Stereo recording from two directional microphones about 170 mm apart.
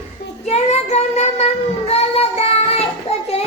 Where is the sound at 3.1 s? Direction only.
35° left (ahead or behind).